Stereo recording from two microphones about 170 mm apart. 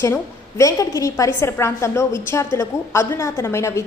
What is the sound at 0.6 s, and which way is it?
A woman's voice, 20° left (ahead or behind).